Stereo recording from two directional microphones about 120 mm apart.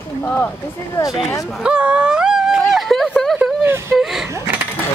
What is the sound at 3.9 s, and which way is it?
Speech, centre (ahead or behind).